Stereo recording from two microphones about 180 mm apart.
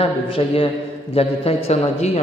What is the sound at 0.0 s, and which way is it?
A man's voice, 30° left (ahead or behind).